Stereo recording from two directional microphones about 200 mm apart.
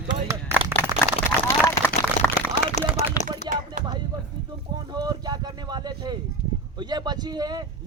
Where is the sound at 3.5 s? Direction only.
20° right (ahead or behind).